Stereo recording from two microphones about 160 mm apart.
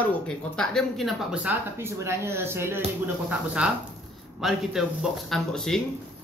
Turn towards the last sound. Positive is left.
turn(degrees=5)  # may be behind; listen again after turning